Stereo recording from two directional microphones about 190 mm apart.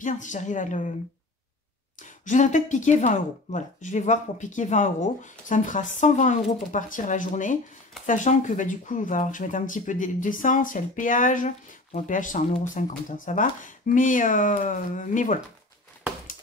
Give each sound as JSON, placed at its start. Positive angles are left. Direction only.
{"t": 0.0, "sound": "speech", "side_deg": 40}
{"t": 2.0, "sound": "speech", "side_deg": 40}